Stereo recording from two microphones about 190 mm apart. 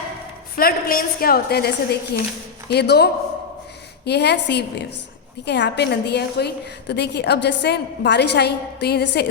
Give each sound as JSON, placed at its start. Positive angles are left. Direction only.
{"t": 0.5, "sound": "a woman's voice", "side_deg": 50}